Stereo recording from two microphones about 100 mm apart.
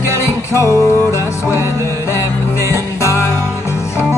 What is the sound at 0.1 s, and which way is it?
Music, 30° left (ahead or behind).